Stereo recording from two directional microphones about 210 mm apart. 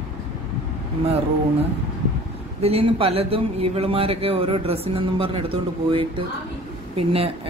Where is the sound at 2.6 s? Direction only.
30° right (ahead or behind).